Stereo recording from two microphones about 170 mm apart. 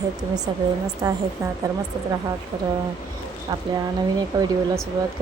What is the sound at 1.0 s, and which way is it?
Speech, 20° right (ahead or behind).